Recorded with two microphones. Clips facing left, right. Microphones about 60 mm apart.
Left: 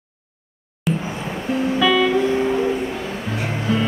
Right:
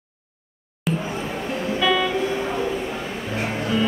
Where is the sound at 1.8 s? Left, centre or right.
Centre.